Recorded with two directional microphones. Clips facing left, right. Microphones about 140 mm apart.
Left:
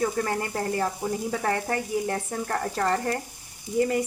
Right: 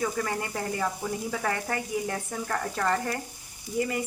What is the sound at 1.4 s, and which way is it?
Speech, 35° left (ahead or behind).